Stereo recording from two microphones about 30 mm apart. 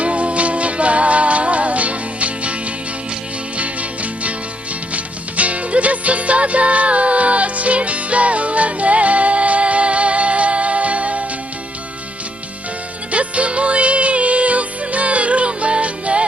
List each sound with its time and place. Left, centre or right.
0.0 s music: right
3.6 s music: right
13.1 s music: right